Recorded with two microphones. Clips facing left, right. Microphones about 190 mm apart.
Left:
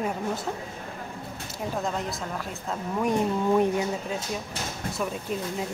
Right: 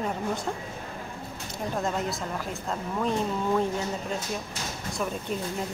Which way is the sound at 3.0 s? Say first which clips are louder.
Left 3 dB; 15° left (ahead or behind).